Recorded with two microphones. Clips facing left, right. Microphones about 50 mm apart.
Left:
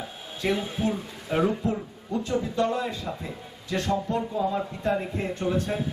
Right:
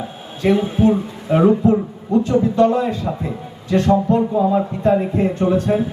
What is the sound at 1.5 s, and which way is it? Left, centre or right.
A man's voice, right.